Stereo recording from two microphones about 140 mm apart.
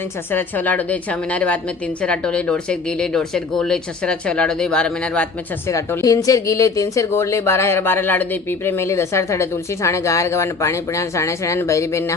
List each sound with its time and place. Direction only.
0.3 s speech: 15° left (ahead or behind)
5.6 s speech: 20° left (ahead or behind)